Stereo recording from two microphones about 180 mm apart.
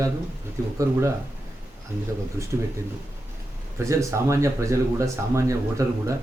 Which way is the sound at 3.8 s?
15° right (ahead or behind).